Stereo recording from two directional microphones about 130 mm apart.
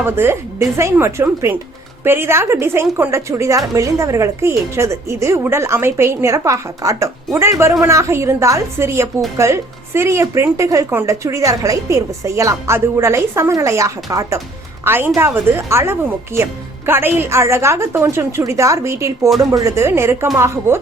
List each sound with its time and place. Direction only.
0.0 s a woman's voice: 20° right (ahead or behind)